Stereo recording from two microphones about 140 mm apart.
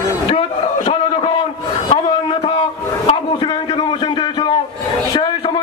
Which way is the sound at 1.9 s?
40° left (ahead or behind).